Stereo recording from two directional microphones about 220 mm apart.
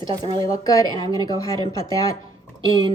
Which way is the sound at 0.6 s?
15° left (ahead or behind).